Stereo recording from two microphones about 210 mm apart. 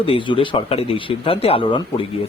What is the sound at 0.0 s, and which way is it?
Speech, 25° left (ahead or behind).